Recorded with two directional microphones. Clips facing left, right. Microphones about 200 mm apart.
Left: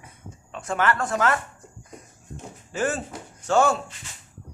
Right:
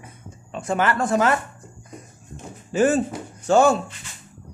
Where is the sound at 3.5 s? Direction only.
25° right (ahead or behind).